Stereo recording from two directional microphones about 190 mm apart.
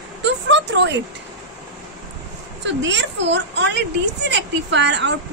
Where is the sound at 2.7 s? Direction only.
70° right (ahead or behind).